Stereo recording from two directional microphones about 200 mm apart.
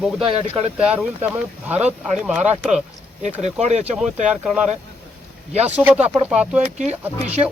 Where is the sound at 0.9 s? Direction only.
5° right (ahead or behind).